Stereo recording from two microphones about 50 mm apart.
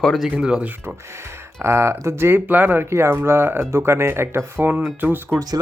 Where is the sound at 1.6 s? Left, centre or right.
Right.